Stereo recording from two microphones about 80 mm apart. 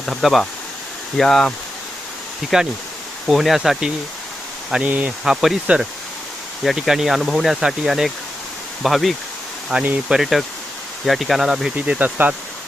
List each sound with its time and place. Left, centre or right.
0.0 s speech: centre
2.5 s speech: centre
4.9 s speech: centre
5.2 s speech: centre
11.9 s speech: centre